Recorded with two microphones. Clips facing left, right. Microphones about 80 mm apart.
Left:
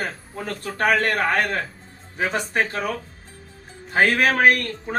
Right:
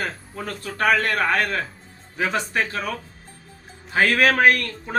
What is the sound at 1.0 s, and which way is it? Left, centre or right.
Speech, left.